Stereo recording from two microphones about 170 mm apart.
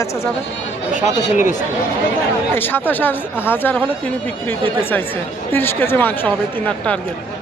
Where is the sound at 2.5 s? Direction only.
10° left (ahead or behind).